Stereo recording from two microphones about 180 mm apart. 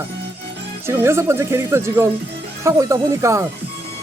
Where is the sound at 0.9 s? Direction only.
15° right (ahead or behind).